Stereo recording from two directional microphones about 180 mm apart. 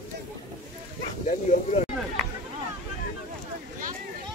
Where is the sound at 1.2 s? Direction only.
45° left (ahead or behind).